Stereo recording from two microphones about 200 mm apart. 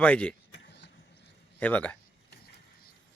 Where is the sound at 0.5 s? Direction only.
60° left (ahead or behind).